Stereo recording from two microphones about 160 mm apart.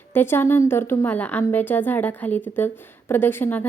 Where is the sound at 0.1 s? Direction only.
15° left (ahead or behind).